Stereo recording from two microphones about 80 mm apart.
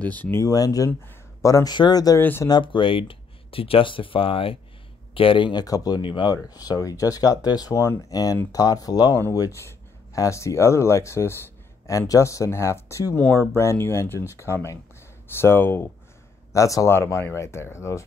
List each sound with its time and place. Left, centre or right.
0.0 s speech: centre
0.5 s speech: left
1.7 s speech: left
2.1 s speech: left
2.6 s speech: left
5.2 s speech: left
16.5 s speech: left